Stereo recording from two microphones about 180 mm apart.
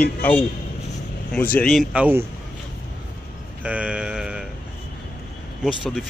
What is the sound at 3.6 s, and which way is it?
Sheep, 5° right (ahead or behind).